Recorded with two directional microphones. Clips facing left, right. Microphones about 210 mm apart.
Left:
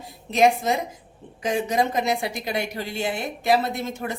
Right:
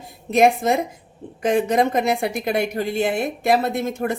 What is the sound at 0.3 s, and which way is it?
A woman's voice, 55° right (ahead or behind).